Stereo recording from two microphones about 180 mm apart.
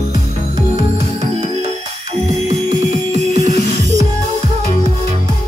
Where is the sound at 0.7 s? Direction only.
40° right (ahead or behind).